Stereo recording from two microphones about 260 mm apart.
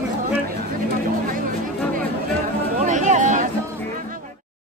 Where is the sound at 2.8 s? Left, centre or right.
Right.